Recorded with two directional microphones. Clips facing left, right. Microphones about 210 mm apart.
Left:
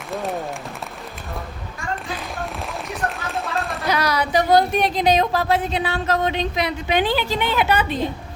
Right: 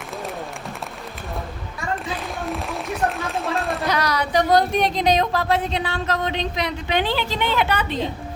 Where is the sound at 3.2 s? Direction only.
Centre (ahead or behind).